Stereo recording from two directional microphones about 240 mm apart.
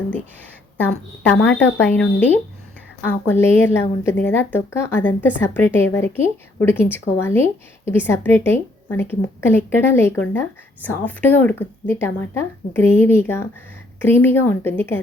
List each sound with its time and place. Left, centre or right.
1.5 s a woman's voice: centre